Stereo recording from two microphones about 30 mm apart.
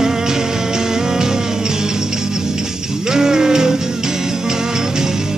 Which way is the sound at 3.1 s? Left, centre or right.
Right.